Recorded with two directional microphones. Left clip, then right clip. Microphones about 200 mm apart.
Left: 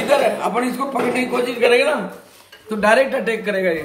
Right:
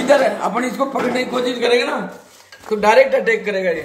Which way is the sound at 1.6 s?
20° right (ahead or behind).